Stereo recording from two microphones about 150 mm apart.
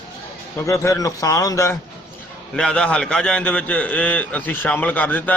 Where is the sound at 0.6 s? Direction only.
20° left (ahead or behind).